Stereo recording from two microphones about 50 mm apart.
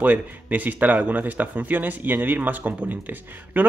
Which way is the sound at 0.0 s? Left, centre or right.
Right.